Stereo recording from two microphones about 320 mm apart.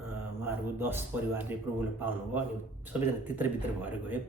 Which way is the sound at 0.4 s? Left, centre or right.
Centre.